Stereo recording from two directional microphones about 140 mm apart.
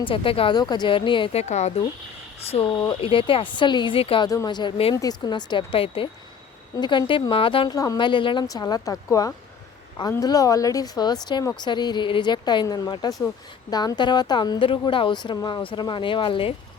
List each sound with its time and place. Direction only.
0.0 s a woman's voice: 40° left (ahead or behind)
2.5 s speech: 40° left (ahead or behind)
2.7 s speech: 25° left (ahead or behind)
3.0 s a woman's voice: 40° left (ahead or behind)
4.3 s a woman's voice: 30° left (ahead or behind)